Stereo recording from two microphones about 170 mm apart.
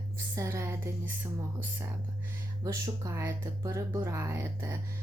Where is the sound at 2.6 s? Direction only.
15° right (ahead or behind).